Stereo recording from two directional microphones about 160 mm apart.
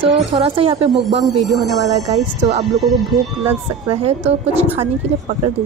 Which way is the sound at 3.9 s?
40° right (ahead or behind).